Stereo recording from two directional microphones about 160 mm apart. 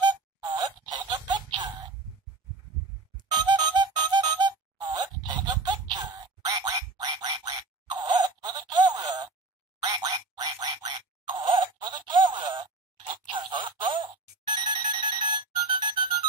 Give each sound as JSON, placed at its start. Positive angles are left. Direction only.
{"t": 0.0, "sound": "music", "side_deg": -25}
{"t": 3.3, "sound": "music", "side_deg": -25}
{"t": 9.8, "sound": "a sound", "side_deg": -25}
{"t": 13.3, "sound": "telephone bell ringing", "side_deg": -30}